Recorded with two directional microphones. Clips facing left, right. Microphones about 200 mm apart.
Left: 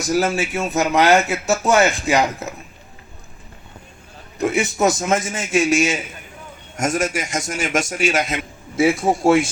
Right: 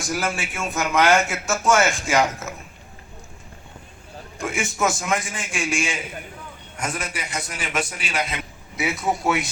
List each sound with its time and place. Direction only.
0.0 s a man's voice: 40° left (ahead or behind)
0.9 s speech: 20° left (ahead or behind)
1.5 s a man's voice: 35° left (ahead or behind)
4.4 s a man's voice: 35° left (ahead or behind)
9.0 s speech: 25° left (ahead or behind)